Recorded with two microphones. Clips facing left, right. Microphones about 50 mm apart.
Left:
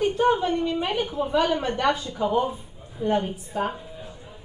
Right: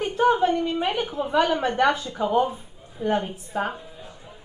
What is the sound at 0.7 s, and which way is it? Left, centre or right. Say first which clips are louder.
A woman's voice: right 1 dB; right.